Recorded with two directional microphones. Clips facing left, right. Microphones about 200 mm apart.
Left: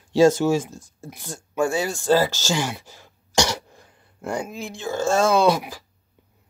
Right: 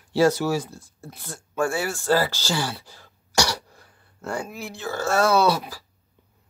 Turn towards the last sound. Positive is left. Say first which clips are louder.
# left 2 dB
turn(degrees=15)  # may be behind; listen again after turning